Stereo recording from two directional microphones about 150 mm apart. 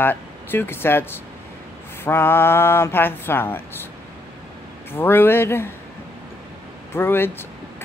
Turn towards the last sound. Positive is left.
turn(degrees=15)  # may be behind; listen again after turning